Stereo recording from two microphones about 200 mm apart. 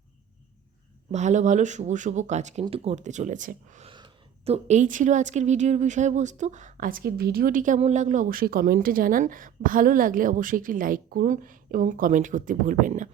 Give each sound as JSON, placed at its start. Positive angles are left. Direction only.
{"t": 1.1, "sound": "a woman's voice", "side_deg": -35}
{"t": 3.9, "sound": "a woman's voice", "side_deg": -25}